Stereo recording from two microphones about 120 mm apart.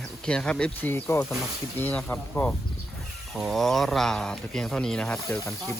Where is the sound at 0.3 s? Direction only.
5° left (ahead or behind).